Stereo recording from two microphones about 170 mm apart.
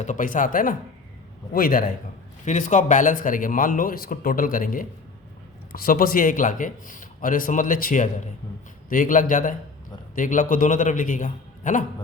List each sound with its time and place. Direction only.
0.0 s a man's voice: 50° left (ahead or behind)
2.4 s a man's voice: 45° left (ahead or behind)